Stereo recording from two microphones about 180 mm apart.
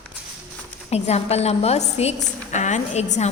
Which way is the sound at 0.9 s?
35° left (ahead or behind).